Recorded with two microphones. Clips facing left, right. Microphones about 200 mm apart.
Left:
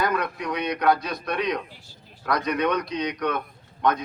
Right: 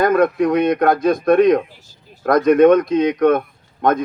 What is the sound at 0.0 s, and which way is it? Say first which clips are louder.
Speech: right 12 dB; 50° right (ahead or behind).